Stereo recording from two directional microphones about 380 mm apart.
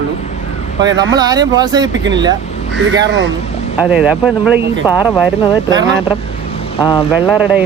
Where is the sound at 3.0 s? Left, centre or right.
Right.